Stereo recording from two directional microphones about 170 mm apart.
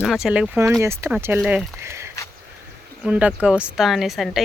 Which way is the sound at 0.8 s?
15° right (ahead or behind).